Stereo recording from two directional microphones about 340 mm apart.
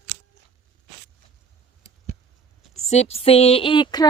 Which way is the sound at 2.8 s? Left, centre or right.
Centre.